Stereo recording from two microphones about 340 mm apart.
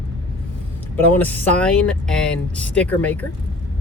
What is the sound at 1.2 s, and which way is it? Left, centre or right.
Speech, centre.